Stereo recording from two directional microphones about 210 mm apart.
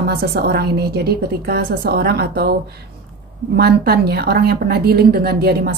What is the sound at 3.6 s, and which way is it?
A woman's voice, 50° right (ahead or behind).